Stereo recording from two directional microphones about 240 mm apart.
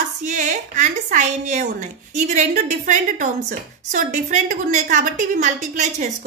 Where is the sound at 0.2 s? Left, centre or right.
Right.